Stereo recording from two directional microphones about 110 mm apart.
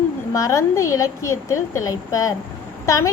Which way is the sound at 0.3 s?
30° left (ahead or behind).